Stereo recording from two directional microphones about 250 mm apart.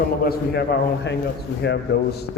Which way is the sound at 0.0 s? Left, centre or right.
Left.